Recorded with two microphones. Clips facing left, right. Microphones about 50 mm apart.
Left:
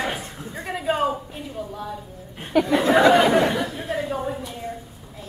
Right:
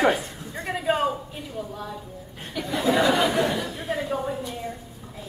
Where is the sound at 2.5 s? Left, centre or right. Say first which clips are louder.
Left 6 dB; left.